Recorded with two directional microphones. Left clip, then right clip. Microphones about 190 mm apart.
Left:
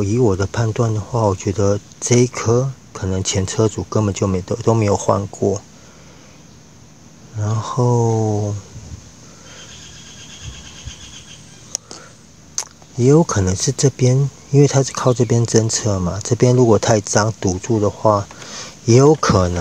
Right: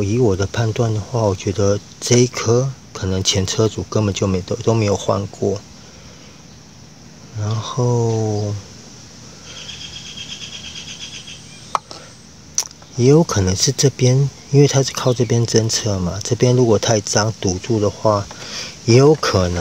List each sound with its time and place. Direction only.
0.0 s speech: 15° left (ahead or behind)
7.3 s speech: 20° left (ahead or behind)
12.5 s a sound: 15° left (ahead or behind)
13.5 s speech: 15° left (ahead or behind)